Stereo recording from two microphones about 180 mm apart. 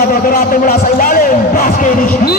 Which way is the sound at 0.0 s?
50° left (ahead or behind).